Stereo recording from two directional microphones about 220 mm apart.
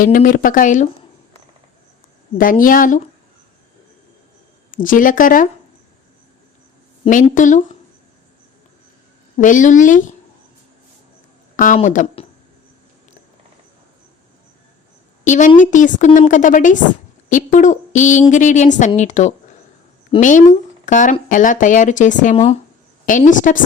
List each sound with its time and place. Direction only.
0.0 s a woman's voice: 40° left (ahead or behind)
2.4 s a woman's voice: 40° left (ahead or behind)
4.7 s a woman's voice: 40° left (ahead or behind)
7.0 s a woman's voice: 35° left (ahead or behind)
9.4 s a woman's voice: 35° left (ahead or behind)
11.5 s a woman's voice: 35° left (ahead or behind)
15.2 s a woman's voice: 35° left (ahead or behind)